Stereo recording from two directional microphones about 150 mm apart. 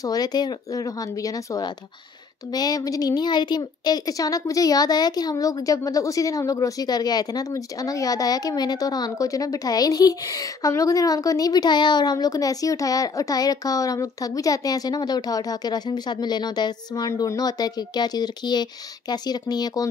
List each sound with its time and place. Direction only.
0.0 s a woman's voice: 25° left (ahead or behind)